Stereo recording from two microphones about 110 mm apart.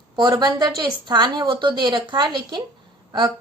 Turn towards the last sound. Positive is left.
turn(degrees=-40)  # may be behind; listen again after turning